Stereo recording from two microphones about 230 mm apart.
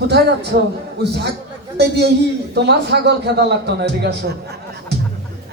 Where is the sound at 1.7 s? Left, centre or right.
Right.